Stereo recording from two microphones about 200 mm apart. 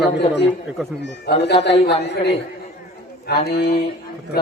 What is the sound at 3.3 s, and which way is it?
Music, 50° left (ahead or behind).